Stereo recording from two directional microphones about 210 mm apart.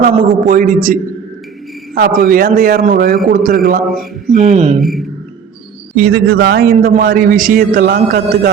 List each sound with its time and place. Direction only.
0.1 s a man's voice: 40° right (ahead or behind)
2.0 s a man's voice: 45° right (ahead or behind)
4.3 s a man's voice: 30° right (ahead or behind)
4.8 s speech: centre (ahead or behind)
6.0 s a man's voice: 50° right (ahead or behind)